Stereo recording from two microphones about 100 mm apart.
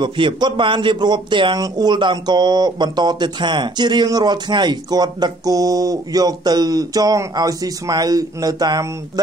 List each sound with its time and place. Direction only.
0.0 s a man's voice: 50° right (ahead or behind)